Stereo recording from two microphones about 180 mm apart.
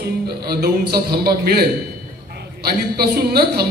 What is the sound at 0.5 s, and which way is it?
A man's voice, 60° right (ahead or behind).